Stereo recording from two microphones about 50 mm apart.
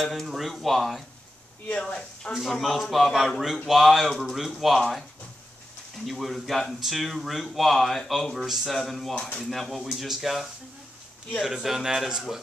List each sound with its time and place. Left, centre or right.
0.0 s speech: centre
2.3 s speech: centre
6.0 s a man's voice: centre